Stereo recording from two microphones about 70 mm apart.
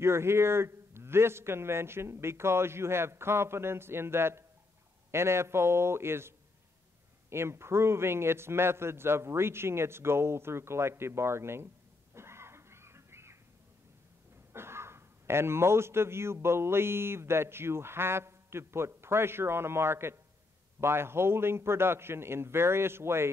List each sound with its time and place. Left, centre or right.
0.0 s a man's voice: right
14.5 s a man's voice: right